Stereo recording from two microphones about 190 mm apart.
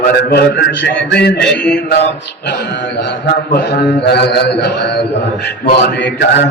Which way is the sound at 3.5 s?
60° left (ahead or behind).